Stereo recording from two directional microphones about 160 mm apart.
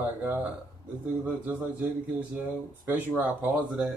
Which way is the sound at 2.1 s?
10° right (ahead or behind).